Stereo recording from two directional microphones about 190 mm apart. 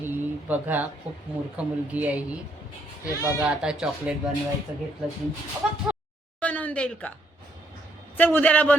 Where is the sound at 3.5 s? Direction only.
5° right (ahead or behind).